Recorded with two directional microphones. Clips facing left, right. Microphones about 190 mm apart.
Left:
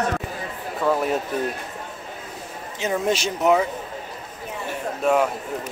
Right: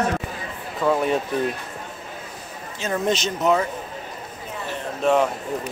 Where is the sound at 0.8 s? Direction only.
5° left (ahead or behind).